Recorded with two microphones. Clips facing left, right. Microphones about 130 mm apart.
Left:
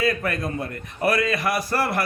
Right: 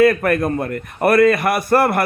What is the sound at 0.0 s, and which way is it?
A man's voice, 60° right (ahead or behind).